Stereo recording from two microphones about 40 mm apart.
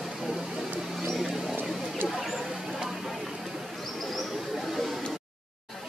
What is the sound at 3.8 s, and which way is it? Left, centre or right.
Bird, centre.